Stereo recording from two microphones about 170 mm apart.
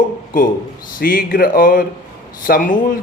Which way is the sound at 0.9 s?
55° left (ahead or behind).